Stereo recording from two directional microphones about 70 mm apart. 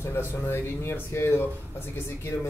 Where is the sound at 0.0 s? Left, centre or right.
Left.